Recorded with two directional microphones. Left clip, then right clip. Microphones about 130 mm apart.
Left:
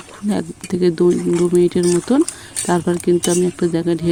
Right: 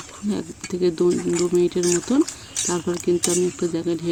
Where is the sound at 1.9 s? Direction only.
50° left (ahead or behind).